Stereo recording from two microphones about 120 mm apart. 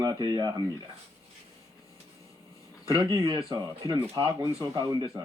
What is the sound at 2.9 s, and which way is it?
Speech, 40° right (ahead or behind).